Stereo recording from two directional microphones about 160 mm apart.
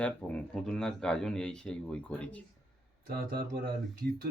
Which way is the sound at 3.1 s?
70° right (ahead or behind).